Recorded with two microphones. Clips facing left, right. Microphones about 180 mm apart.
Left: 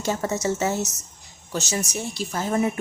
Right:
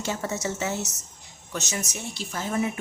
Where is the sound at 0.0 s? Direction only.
40° left (ahead or behind).